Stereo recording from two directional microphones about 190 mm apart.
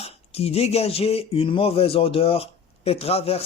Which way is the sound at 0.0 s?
30° left (ahead or behind).